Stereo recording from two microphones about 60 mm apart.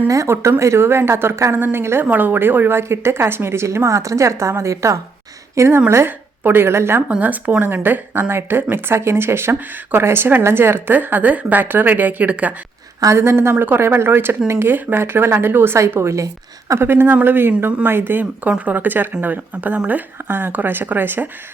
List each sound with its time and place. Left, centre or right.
0.3 s a woman's voice: right
2.0 s a woman's voice: right
7.2 s speech: right
13.1 s a woman's voice: right
16.8 s speech: right